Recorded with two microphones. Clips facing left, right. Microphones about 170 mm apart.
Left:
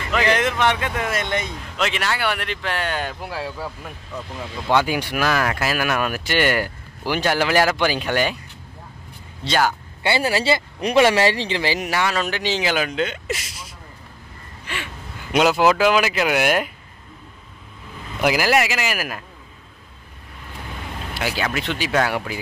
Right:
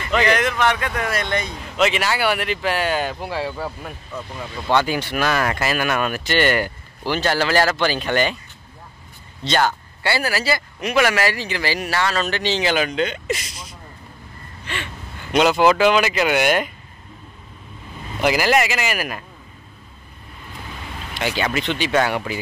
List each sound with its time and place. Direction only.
0.3 s speech: 25° left (ahead or behind)
1.8 s speech: 5° right (ahead or behind)
4.6 s speech: 10° left (ahead or behind)
9.4 s speech: 10° left (ahead or behind)
10.0 s speech: 25° left (ahead or behind); by 13.7 s 5° left (ahead or behind)
15.3 s speech: 5° left (ahead or behind)
18.2 s speech: 5° left (ahead or behind)
21.1 s speech: 5° left (ahead or behind)